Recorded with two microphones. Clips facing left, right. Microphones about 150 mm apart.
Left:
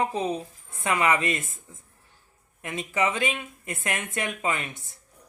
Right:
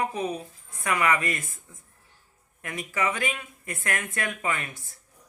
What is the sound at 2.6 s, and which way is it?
Speech, 25° left (ahead or behind).